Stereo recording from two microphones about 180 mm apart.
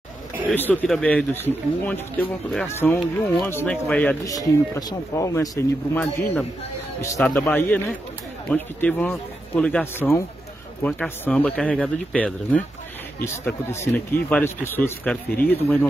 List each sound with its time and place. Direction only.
0.5 s a man's voice: 10° left (ahead or behind)
4.3 s a man's voice: 20° left (ahead or behind)